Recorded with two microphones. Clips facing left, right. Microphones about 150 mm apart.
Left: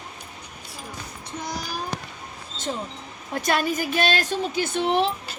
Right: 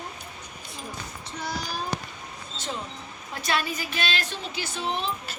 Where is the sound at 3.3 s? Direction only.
45° left (ahead or behind); by 5.1 s 70° left (ahead or behind).